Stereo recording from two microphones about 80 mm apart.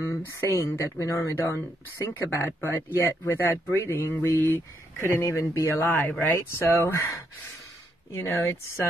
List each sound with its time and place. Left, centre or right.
0.0 s speech: left
2.3 s speech: left
5.8 s speech: centre
6.3 s speech: left